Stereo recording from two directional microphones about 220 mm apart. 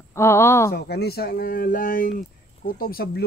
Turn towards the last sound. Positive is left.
turn(degrees=45)  # may be behind; listen again after turning